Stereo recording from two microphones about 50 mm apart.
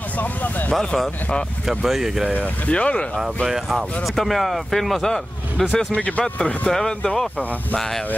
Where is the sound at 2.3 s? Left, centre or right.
Left.